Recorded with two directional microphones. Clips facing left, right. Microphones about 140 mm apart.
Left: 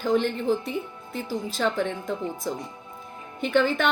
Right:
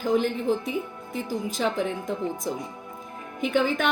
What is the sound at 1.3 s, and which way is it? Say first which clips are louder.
A woman's voice: left 1 dB; 15° right (ahead or behind).